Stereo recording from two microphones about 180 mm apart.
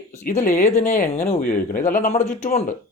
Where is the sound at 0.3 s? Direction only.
45° left (ahead or behind).